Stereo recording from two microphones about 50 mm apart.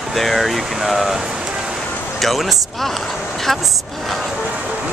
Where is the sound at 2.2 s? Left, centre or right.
Centre.